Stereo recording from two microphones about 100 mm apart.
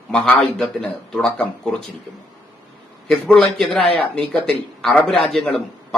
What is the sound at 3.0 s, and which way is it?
Speech, 5° left (ahead or behind).